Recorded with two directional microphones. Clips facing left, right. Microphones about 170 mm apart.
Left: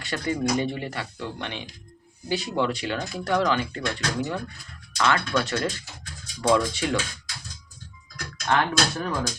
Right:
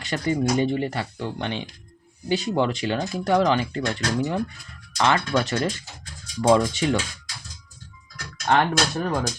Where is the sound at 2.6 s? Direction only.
25° right (ahead or behind).